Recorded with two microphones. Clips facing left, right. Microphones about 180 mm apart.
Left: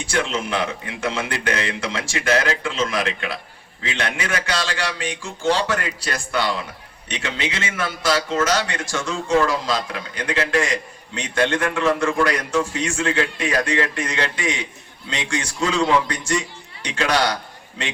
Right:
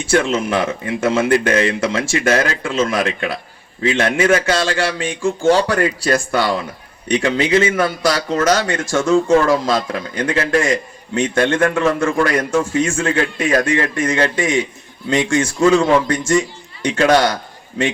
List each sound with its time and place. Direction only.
0.1 s a man's voice: 45° right (ahead or behind)